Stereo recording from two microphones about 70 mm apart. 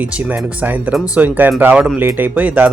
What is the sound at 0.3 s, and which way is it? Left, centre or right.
Speech, right.